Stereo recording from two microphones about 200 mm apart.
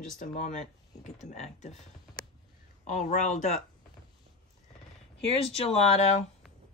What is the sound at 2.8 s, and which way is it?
Speech, 35° left (ahead or behind).